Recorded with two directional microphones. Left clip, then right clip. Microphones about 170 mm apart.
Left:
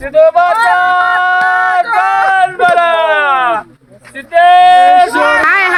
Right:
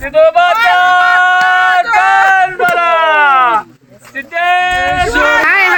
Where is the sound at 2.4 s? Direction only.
45° left (ahead or behind).